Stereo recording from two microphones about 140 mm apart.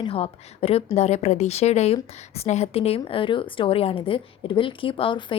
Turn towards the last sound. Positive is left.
turn(degrees=35)  # may be behind; listen again after turning